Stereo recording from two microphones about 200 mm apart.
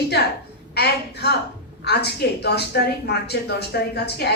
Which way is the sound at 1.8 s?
55° left (ahead or behind).